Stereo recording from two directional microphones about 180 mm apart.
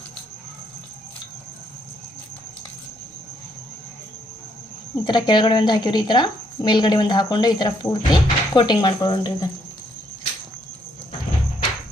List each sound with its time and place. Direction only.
5.0 s a woman's voice: 25° left (ahead or behind)